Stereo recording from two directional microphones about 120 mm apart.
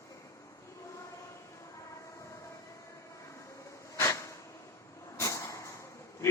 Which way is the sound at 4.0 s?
25° left (ahead or behind).